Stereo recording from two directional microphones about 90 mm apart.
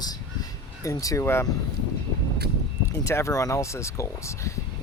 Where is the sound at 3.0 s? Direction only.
35° left (ahead or behind).